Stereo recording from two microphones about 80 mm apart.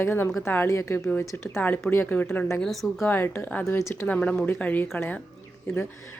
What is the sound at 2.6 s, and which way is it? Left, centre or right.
Speech, centre.